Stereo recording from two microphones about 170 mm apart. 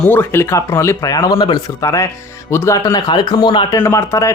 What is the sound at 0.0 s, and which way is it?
Speech, 10° left (ahead or behind).